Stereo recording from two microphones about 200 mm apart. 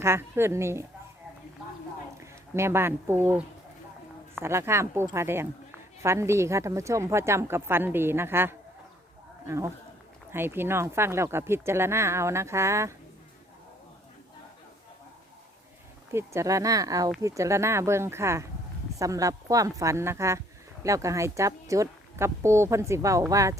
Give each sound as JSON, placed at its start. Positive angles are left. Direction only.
{"t": 0.0, "sound": "speech", "side_deg": -10}
{"t": 2.2, "sound": "speech", "side_deg": -15}
{"t": 4.4, "sound": "speech", "side_deg": -15}
{"t": 16.1, "sound": "speech", "side_deg": -15}